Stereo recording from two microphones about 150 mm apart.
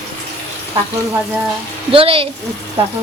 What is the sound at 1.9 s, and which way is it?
Speech, 40° right (ahead or behind).